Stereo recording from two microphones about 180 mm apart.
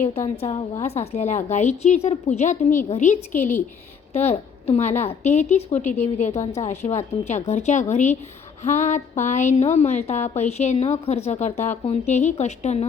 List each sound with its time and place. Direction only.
0.3 s a woman's voice: 35° left (ahead or behind)